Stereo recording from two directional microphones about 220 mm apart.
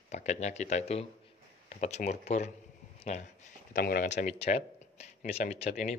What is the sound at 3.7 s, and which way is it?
A man's voice, 45° left (ahead or behind).